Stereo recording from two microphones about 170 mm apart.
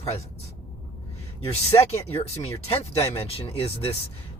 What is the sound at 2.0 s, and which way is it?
Speech, 35° left (ahead or behind).